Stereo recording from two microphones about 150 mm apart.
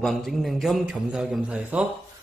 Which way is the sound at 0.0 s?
Centre (ahead or behind).